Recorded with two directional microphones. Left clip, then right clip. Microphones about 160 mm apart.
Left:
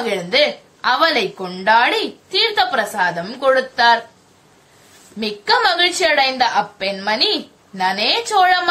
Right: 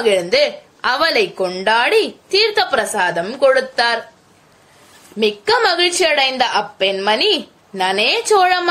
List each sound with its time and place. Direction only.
0.0 s a woman's voice: 45° right (ahead or behind)
5.4 s a woman's voice: 40° right (ahead or behind)